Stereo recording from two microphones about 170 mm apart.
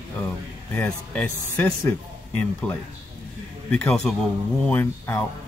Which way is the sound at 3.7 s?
5° left (ahead or behind).